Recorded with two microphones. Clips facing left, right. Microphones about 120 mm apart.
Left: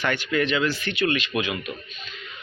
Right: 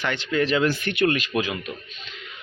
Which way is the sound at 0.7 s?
50° right (ahead or behind).